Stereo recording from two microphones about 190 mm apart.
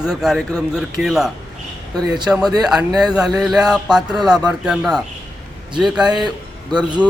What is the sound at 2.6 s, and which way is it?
A man's voice, centre (ahead or behind).